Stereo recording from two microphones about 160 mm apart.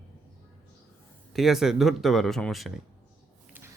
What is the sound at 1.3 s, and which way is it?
Speech, centre (ahead or behind).